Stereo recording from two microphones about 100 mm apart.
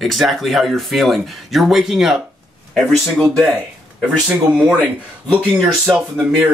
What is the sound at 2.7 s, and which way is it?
Speech, 5° left (ahead or behind).